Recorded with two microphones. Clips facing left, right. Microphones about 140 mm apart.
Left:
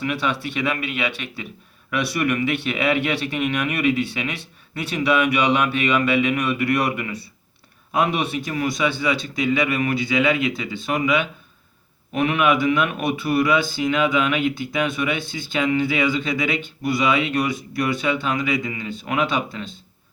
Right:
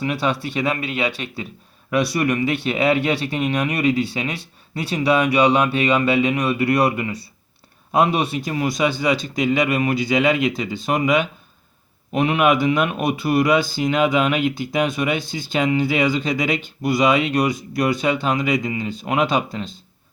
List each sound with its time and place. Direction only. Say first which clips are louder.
0.0 s speech: right 2 dB; 35° right (ahead or behind)